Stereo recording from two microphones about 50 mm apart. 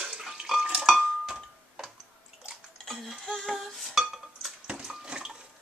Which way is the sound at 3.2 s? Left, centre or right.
Centre.